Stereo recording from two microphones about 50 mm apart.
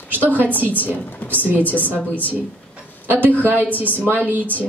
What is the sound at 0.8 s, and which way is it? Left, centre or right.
Speech, left.